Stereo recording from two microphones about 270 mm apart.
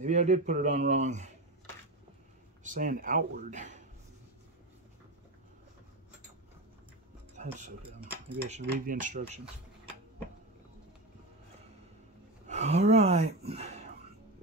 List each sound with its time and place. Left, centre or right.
0.0 s speech: right
2.6 s speech: right
7.3 s speech: right
12.4 s speech: right